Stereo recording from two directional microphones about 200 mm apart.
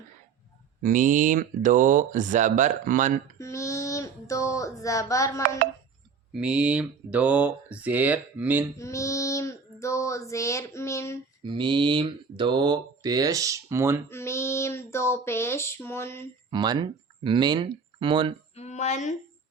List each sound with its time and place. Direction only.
0.8 s speech: 40° right (ahead or behind)
3.3 s female singing: 15° left (ahead or behind)
6.3 s speech: 5° right (ahead or behind)
8.8 s female singing: 15° left (ahead or behind)
11.4 s speech: 25° right (ahead or behind)
14.1 s female singing: 15° left (ahead or behind)
16.5 s speech: 20° right (ahead or behind)
18.5 s speech: 35° left (ahead or behind)